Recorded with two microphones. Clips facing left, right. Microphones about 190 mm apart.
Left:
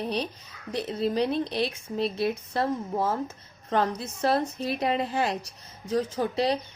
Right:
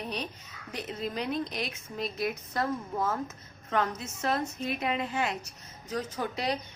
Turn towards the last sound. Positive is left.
turn(degrees=30)  # may be behind; listen again after turning